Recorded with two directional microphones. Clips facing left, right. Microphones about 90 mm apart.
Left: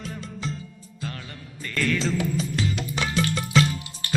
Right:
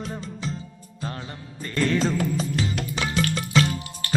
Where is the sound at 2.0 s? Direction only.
45° right (ahead or behind).